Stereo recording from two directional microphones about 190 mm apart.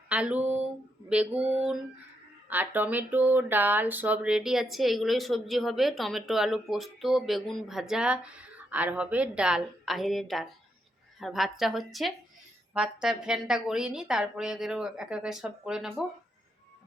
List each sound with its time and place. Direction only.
0.1 s speech: 5° right (ahead or behind)